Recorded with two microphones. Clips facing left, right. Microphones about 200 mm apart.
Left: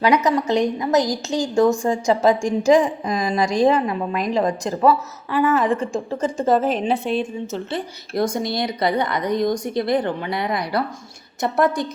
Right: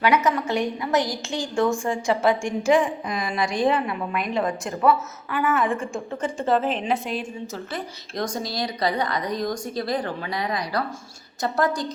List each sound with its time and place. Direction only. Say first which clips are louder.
0.0 s a woman's voice: left 3 dB; 35° left (ahead or behind)